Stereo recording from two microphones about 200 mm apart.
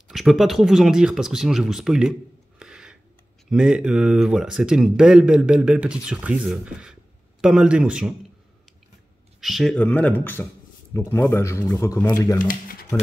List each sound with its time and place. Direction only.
0.1 s speech: centre (ahead or behind)
2.6 s a sound: 5° right (ahead or behind)
3.4 s speech: 5° right (ahead or behind)
9.4 s speech: centre (ahead or behind); by 12.4 s 15° left (ahead or behind)
12.4 s speech: 40° left (ahead or behind)